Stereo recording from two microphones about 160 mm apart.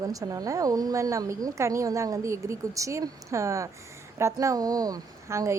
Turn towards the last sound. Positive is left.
turn(degrees=-20)  # may be behind; listen again after turning